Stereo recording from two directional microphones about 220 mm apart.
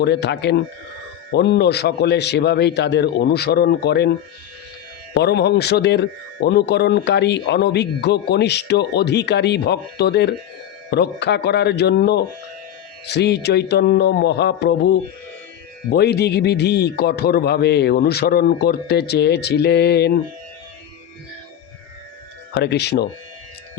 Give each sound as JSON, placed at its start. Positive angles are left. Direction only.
{"t": 0.0, "sound": "a man's voice", "side_deg": 50}
{"t": 5.1, "sound": "a man's voice", "side_deg": 50}
{"t": 22.5, "sound": "a man's voice", "side_deg": 50}